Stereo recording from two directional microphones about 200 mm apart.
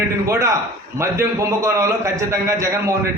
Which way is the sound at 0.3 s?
15° right (ahead or behind).